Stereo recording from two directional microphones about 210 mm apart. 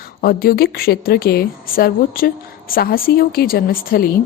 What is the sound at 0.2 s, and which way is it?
Speech, 45° left (ahead or behind).